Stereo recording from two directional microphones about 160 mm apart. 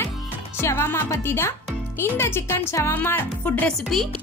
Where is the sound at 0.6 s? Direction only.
15° left (ahead or behind).